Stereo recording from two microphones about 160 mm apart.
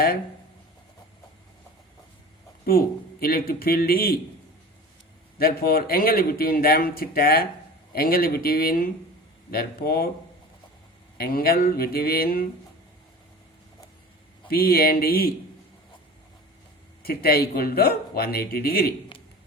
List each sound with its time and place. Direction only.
2.6 s speech: 65° left (ahead or behind)
5.4 s speech: 70° left (ahead or behind)
11.2 s speech: 70° left (ahead or behind)
14.5 s speech: 70° left (ahead or behind)
17.1 s speech: 75° left (ahead or behind)